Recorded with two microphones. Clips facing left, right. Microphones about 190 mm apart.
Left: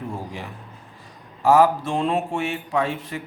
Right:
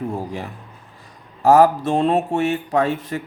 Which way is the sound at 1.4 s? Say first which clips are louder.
Right 3 dB; 40° right (ahead or behind).